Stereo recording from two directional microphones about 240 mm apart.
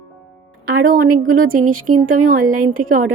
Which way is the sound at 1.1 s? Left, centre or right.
Right.